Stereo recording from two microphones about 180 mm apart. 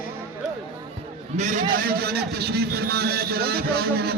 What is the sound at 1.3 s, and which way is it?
A man's voice, 45° right (ahead or behind).